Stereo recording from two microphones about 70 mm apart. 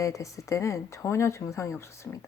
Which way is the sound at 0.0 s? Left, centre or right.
Left.